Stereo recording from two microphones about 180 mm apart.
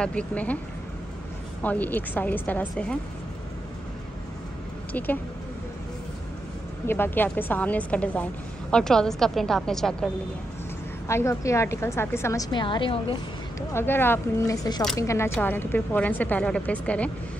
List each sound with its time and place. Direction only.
0.0 s a woman's voice: 5° left (ahead or behind)
1.6 s a woman's voice: 10° left (ahead or behind)
4.9 s a woman's voice: 10° left (ahead or behind)
6.9 s a woman's voice: 10° left (ahead or behind)
11.1 s a woman's voice: 15° left (ahead or behind)
13.6 s a woman's voice: 10° left (ahead or behind)